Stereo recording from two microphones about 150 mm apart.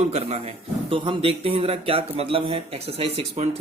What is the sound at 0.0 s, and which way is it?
A man's voice, 45° right (ahead or behind).